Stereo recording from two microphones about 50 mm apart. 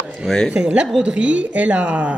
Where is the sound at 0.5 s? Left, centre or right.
Centre.